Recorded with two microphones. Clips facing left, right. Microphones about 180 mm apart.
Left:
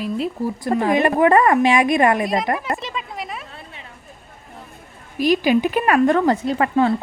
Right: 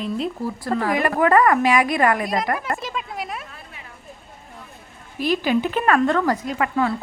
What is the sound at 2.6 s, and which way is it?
Speech, centre (ahead or behind).